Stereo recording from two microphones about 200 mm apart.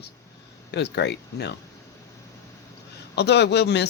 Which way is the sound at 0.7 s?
60° left (ahead or behind).